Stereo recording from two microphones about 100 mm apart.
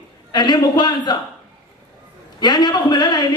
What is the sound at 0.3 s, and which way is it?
Speech, 45° left (ahead or behind).